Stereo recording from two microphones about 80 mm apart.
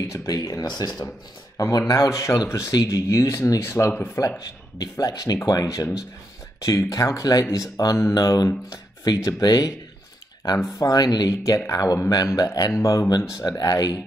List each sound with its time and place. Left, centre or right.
0.1 s speech: left
1.6 s speech: left
10.8 s speech: left
13.5 s speech: left